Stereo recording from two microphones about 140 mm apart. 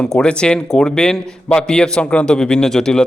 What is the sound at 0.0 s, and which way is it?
A man's voice, 5° left (ahead or behind).